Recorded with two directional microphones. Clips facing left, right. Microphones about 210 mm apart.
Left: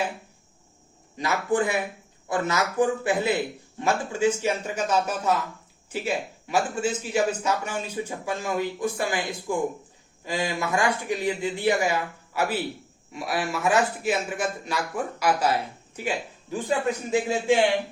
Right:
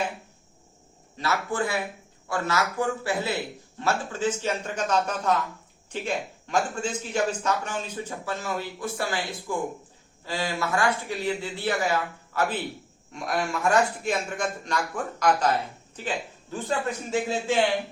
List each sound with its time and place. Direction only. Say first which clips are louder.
1.1 s a man's voice: left 4 dB; 15° left (ahead or behind)